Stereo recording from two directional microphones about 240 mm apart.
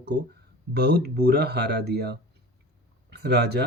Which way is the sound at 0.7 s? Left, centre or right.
Right.